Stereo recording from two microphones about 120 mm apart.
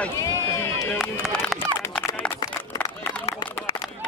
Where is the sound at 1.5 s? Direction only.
10° left (ahead or behind).